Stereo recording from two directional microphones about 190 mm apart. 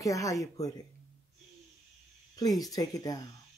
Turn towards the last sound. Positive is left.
turn(degrees=20)  # may be behind; listen again after turning